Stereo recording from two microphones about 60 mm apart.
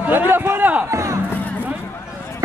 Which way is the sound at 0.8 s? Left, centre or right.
Right.